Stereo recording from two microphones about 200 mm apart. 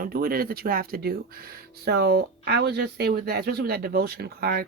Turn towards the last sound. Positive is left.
turn(degrees=-50)  # may be behind; listen again after turning